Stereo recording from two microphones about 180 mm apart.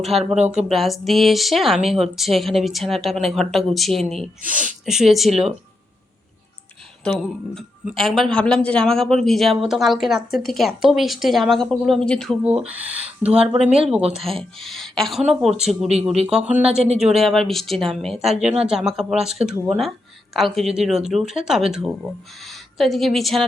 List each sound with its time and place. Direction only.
0.0 s speech: centre (ahead or behind)
4.4 s speech: 45° right (ahead or behind)
4.9 s speech: centre (ahead or behind)
7.2 s speech: centre (ahead or behind)
12.5 s a woman's voice: 10° right (ahead or behind)